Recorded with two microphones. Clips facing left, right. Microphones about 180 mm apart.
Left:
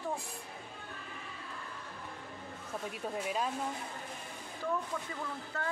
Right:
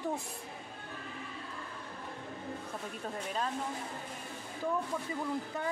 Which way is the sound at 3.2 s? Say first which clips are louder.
Left 2 dB; 10° left (ahead or behind).